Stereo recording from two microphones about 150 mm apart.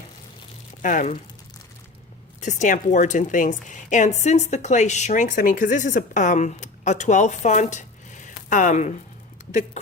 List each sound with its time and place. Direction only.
0.8 s a woman's voice: 60° left (ahead or behind)
2.4 s a woman's voice: 55° left (ahead or behind)